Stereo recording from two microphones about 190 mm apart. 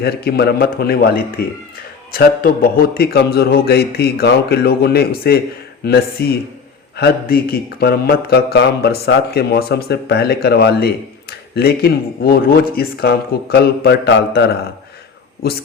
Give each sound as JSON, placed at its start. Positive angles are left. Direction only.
{"t": 0.0, "sound": "speech", "side_deg": 60}
{"t": 2.9, "sound": "speech", "side_deg": 55}